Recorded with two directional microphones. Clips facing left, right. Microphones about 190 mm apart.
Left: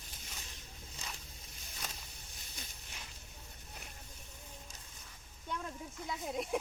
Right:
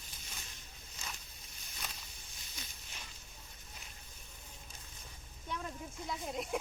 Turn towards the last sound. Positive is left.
turn(degrees=0)  # may be behind; listen again after turning